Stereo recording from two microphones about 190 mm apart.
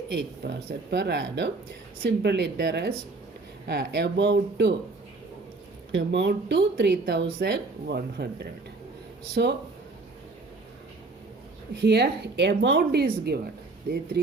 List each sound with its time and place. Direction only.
0.1 s speech: 60° right (ahead or behind)
5.9 s speech: 70° right (ahead or behind)
9.3 s speech: 60° right (ahead or behind)
11.8 s speech: 60° right (ahead or behind)